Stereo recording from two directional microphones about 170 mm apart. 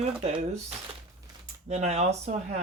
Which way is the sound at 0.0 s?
40° right (ahead or behind).